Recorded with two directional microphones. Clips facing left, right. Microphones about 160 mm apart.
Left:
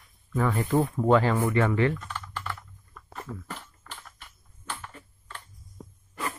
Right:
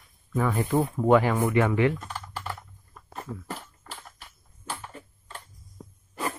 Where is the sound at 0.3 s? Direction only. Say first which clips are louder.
Even; 10° right (ahead or behind).